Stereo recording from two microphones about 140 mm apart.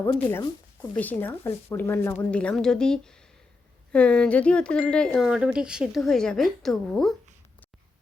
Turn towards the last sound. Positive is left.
turn(degrees=5)  # may be behind; listen again after turning